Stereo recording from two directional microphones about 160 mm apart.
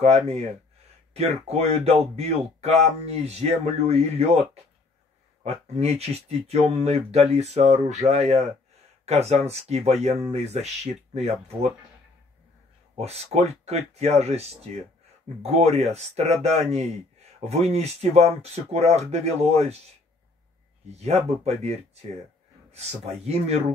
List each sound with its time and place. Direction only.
1.1 s speech: 40° right (ahead or behind)
5.4 s speech: 40° right (ahead or behind)
12.9 s speech: 40° right (ahead or behind)
21.0 s speech: 40° right (ahead or behind)